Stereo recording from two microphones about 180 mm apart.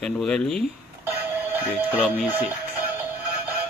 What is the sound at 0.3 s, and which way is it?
Speech, 5° left (ahead or behind).